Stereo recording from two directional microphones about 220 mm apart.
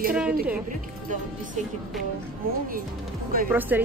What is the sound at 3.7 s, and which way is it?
Speech, 10° right (ahead or behind).